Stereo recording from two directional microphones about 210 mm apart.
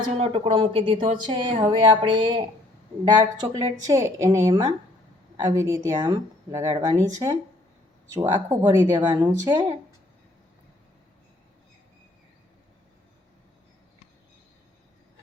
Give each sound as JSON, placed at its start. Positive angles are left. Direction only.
{"t": 0.2, "sound": "a woman's voice", "side_deg": -30}